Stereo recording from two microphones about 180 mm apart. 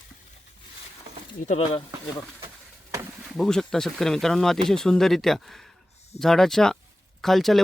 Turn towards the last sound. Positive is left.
turn(degrees=0)  # may be behind; listen again after turning